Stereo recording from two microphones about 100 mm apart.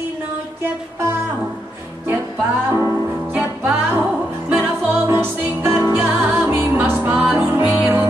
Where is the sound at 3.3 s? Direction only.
15° right (ahead or behind).